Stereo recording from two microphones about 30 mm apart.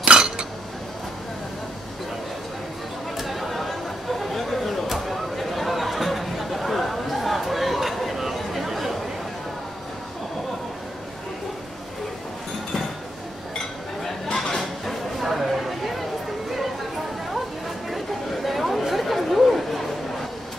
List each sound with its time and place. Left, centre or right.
0.0 s dishes: right
3.2 s chatter: centre
14.5 s a sound: centre
17.8 s chatter: centre